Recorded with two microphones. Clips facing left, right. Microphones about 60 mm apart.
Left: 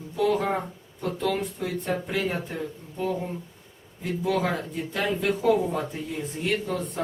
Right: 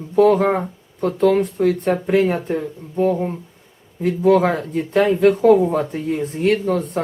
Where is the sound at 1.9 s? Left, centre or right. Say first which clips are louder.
Right 11 dB; right.